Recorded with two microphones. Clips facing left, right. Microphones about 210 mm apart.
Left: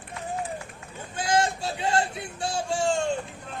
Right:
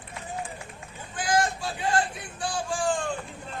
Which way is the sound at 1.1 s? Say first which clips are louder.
Left 1 dB; 25° left (ahead or behind).